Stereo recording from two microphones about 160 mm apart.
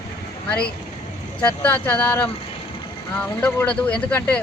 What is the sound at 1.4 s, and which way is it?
Speech, 10° left (ahead or behind).